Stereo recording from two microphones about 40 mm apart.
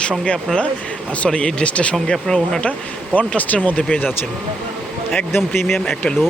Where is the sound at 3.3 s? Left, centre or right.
Left.